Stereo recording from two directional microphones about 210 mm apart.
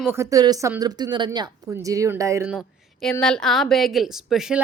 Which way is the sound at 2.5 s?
5° left (ahead or behind).